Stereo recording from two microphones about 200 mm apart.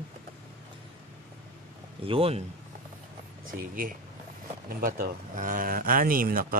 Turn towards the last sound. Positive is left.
turn(degrees=-45)  # may be behind; listen again after turning